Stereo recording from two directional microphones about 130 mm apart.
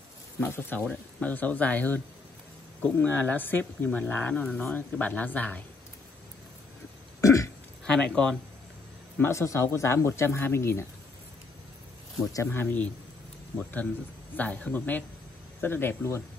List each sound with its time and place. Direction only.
0.4 s speech: 15° left (ahead or behind); by 4.7 s centre (ahead or behind)
4.7 s speech: 10° left (ahead or behind)
7.2 s burping: 25° left (ahead or behind)
7.8 s speech: 5° left (ahead or behind)
9.2 s speech: 20° left (ahead or behind)
12.2 s speech: 25° left (ahead or behind)